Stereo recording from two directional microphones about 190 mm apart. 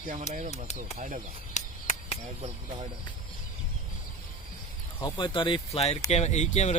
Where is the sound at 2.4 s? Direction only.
30° right (ahead or behind).